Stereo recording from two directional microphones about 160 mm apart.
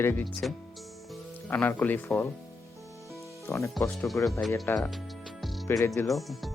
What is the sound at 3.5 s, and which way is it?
Speech, 20° left (ahead or behind).